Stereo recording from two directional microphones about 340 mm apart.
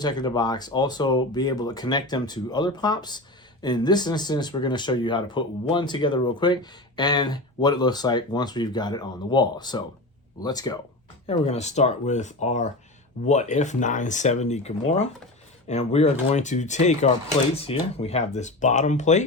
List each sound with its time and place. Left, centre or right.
0.0 s speech: centre